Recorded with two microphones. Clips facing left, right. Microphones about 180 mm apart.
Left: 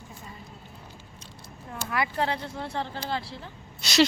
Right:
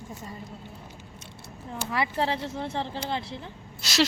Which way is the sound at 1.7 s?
25° right (ahead or behind).